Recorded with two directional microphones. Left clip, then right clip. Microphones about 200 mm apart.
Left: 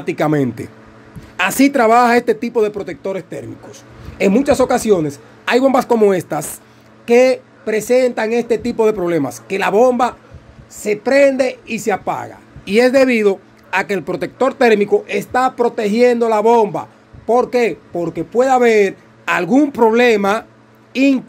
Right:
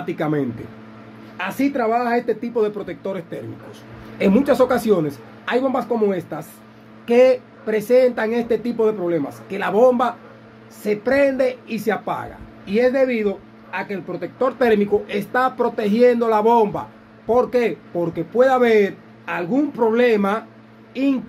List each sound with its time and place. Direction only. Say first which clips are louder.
0.0 s speech: left 6 dB; 40° left (ahead or behind)
1.3 s speech: left 8 dB; 55° left (ahead or behind)
2.5 s speech: left 4 dB; 35° left (ahead or behind)
7.1 s speech: left 3 dB; 35° left (ahead or behind); by 14.3 s 60° left (ahead or behind)
14.4 s speech: left 5 dB; 40° left (ahead or behind)
19.2 s speech: left 7 dB; 55° left (ahead or behind)